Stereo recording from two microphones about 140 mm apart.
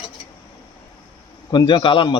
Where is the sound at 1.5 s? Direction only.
35° left (ahead or behind).